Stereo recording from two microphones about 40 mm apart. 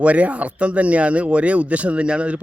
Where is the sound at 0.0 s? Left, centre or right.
Right.